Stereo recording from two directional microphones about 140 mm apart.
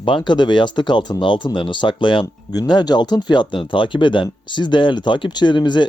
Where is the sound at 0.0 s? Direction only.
35° left (ahead or behind).